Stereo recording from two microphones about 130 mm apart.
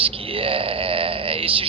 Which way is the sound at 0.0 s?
45° right (ahead or behind).